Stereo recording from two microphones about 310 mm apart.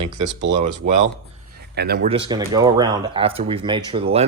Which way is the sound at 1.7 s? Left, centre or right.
Right.